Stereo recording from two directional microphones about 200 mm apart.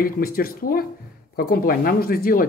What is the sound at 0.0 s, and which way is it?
Speech, 45° left (ahead or behind).